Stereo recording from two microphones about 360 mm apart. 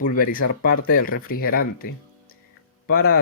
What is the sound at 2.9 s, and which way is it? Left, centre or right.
Speech, left.